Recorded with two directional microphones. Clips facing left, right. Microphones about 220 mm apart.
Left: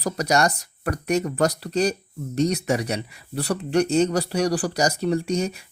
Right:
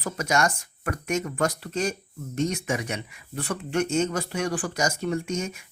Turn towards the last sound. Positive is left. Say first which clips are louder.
# left 5 dB
turn(degrees=35)  # may be behind; listen again after turning